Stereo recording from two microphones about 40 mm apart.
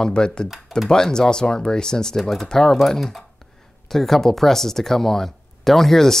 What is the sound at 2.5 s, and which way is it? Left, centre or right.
Speech, centre.